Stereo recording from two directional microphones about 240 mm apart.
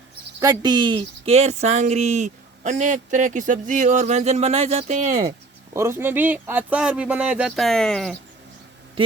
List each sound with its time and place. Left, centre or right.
0.3 s speech: centre
5.7 s speech: centre